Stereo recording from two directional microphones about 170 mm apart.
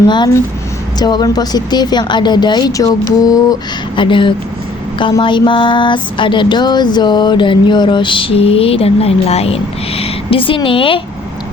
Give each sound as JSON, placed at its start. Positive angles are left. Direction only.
{"t": 0.1, "sound": "speech", "side_deg": 25}